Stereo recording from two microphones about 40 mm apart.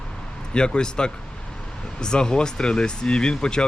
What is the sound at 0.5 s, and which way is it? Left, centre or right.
Speech, left.